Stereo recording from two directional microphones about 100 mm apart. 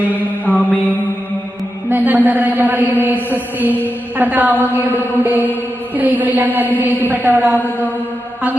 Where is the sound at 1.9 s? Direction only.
15° right (ahead or behind).